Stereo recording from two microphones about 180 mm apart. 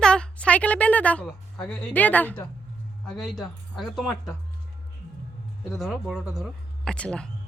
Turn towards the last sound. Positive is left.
turn(degrees=5)  # may be behind; listen again after turning